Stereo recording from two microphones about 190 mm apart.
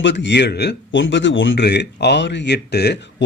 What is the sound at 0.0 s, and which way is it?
Speech, 70° left (ahead or behind).